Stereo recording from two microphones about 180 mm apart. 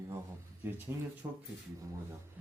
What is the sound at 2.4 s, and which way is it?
Speech, 10° right (ahead or behind).